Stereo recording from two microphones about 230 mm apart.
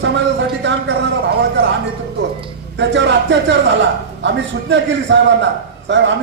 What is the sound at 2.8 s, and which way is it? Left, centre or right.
A man's voice, right.